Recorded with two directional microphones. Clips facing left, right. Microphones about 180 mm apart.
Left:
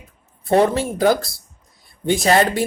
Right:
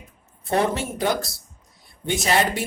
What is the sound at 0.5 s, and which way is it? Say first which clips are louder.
Speech: left 6 dB; 40° left (ahead or behind).